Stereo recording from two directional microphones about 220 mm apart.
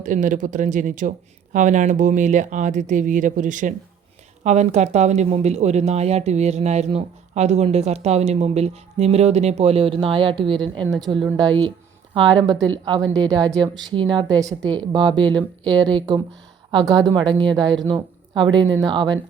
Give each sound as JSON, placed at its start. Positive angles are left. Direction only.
{"t": 0.0, "sound": "speech", "side_deg": -35}